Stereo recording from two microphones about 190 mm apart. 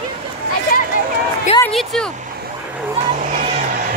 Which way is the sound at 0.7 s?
50° left (ahead or behind).